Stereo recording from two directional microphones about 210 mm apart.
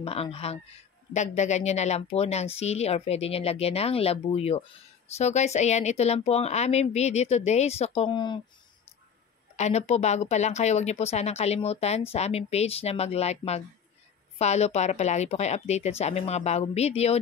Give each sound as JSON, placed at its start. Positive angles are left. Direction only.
{"t": 0.0, "sound": "speech", "side_deg": 30}
{"t": 9.6, "sound": "speech", "side_deg": 30}